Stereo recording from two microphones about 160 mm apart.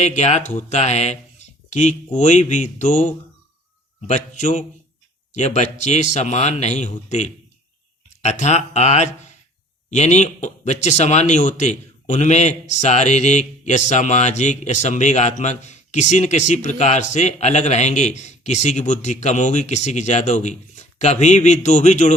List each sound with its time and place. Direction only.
0.0 s a man's voice: 45° left (ahead or behind)